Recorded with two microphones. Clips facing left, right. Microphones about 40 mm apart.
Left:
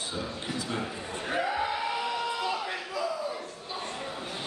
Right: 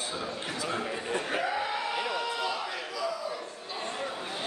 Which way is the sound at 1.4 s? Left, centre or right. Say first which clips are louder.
Left 1 dB; centre.